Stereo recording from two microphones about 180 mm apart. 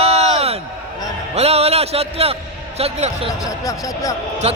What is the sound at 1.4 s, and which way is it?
A man's voice, 35° right (ahead or behind).